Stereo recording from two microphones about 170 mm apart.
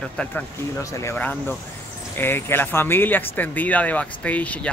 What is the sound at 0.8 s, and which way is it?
Speech, 20° left (ahead or behind).